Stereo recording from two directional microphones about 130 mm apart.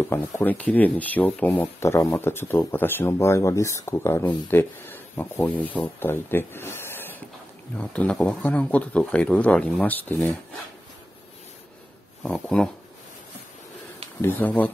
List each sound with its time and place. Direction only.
0.0 s speech: 20° left (ahead or behind)
12.2 s speech: 5° left (ahead or behind)
14.2 s speech: 15° left (ahead or behind)